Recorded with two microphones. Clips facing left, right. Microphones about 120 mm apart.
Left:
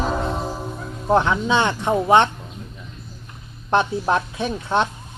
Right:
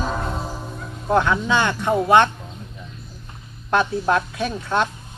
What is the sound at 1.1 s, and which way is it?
Speech, 20° left (ahead or behind).